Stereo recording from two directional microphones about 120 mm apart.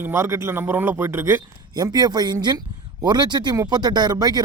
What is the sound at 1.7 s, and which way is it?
Speech, 35° right (ahead or behind).